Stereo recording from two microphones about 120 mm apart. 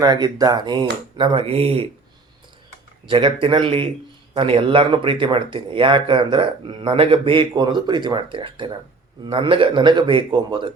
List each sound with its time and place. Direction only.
0.0 s speech: 35° right (ahead or behind); by 1.9 s 55° right (ahead or behind)
3.1 s speech: 45° right (ahead or behind)